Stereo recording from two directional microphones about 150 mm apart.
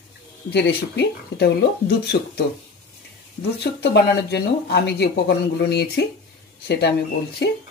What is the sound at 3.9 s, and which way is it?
Speech, 90° left.